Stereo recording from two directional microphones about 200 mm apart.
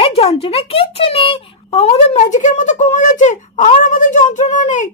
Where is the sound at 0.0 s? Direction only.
30° left (ahead or behind).